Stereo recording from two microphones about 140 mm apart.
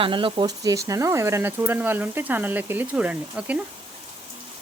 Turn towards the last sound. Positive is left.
turn(degrees=-10)  # may be behind; listen again after turning